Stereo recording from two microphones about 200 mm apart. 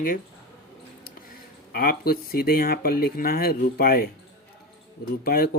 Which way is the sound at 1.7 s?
50° left (ahead or behind).